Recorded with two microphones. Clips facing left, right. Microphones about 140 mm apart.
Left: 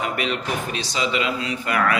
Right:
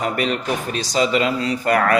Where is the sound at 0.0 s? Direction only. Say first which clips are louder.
Right 3 dB; 40° right (ahead or behind).